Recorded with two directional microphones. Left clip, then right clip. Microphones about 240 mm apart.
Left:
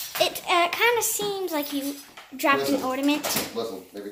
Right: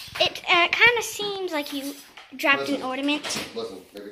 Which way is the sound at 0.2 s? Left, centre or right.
Centre.